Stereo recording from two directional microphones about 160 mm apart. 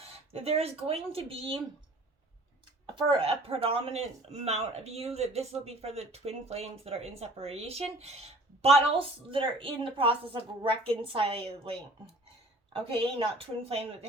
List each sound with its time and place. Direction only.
0.3 s a woman's voice: 40° right (ahead or behind)
2.8 s a woman's voice: 30° right (ahead or behind)